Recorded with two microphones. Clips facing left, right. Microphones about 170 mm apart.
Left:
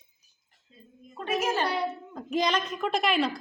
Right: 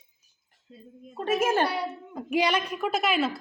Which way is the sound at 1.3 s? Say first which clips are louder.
Right 4 dB; 50° right (ahead or behind).